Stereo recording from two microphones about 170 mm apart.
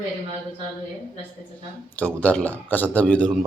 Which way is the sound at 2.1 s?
5° left (ahead or behind).